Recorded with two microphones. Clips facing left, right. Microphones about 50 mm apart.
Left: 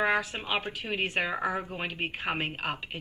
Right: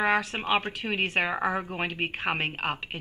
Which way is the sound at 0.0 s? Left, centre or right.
Right.